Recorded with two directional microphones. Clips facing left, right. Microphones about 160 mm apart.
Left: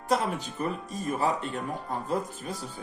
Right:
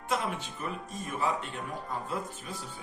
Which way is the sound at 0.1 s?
40° left (ahead or behind).